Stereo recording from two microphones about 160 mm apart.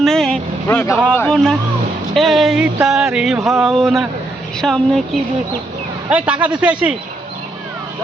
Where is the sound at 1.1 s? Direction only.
5° left (ahead or behind).